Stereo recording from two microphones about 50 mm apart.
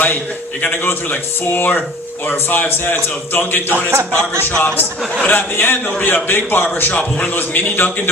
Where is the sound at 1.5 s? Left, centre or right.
Left.